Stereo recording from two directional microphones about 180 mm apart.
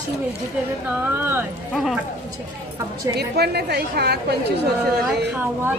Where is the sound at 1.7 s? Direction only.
Centre (ahead or behind).